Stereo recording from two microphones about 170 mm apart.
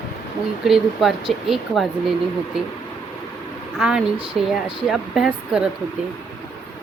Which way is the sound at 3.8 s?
5° right (ahead or behind).